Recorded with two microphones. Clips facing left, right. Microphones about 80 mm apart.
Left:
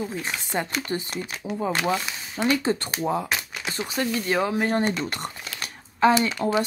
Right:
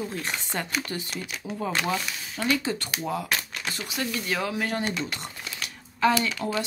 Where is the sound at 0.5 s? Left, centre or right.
Centre.